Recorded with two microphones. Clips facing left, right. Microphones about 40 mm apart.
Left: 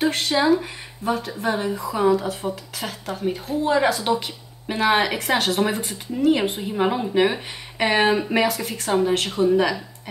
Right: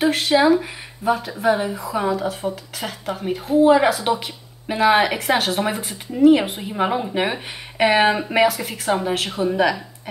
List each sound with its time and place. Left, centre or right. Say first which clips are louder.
0.0 s a woman's voice: right 4 dB; centre
9.3 s speech: left 3 dB; right